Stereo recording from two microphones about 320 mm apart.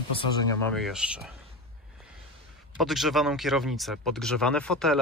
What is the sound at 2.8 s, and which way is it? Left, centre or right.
Speech, centre.